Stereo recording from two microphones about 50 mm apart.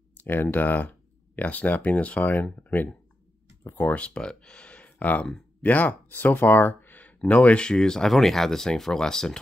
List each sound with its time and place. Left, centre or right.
0.2 s speech: left
4.0 s speech: left